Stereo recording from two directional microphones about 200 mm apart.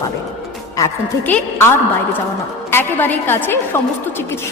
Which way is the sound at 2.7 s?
10° left (ahead or behind).